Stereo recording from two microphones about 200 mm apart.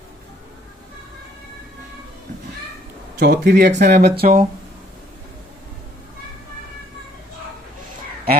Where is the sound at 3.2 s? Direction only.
55° right (ahead or behind).